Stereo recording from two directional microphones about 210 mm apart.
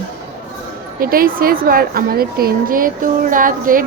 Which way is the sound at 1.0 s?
45° right (ahead or behind).